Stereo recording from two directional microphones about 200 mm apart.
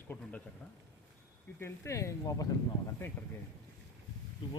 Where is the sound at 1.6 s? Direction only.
15° left (ahead or behind).